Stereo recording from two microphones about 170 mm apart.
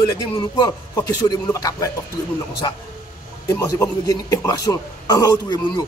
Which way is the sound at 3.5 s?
20° left (ahead or behind).